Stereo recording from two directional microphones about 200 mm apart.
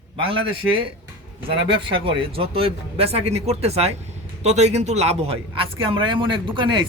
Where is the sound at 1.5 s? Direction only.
25° right (ahead or behind).